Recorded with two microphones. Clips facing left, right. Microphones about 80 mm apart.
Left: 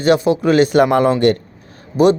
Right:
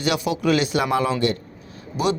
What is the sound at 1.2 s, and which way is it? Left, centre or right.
Speech, left.